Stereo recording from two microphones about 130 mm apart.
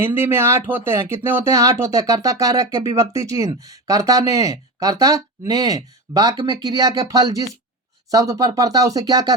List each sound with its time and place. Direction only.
0.0 s speech: 20° right (ahead or behind)